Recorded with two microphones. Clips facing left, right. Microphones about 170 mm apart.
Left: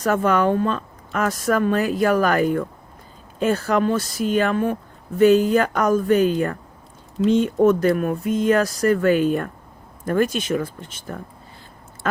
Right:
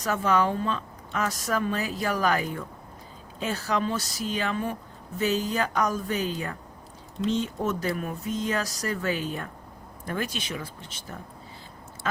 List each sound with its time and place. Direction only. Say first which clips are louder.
0.0 s speech: left 6 dB; 55° left (ahead or behind)